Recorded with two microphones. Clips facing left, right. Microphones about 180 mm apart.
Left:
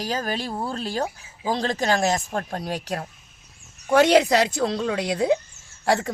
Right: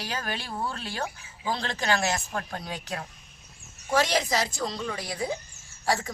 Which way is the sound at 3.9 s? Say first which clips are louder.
Left 9 dB; 60° left (ahead or behind).